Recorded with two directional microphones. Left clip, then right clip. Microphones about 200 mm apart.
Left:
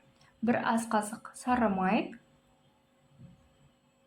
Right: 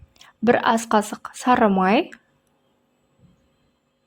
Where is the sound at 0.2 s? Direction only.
40° right (ahead or behind).